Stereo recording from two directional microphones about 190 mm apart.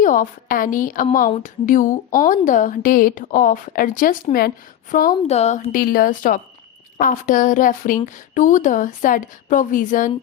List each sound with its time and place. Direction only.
0.0 s a woman's voice: 45° left (ahead or behind)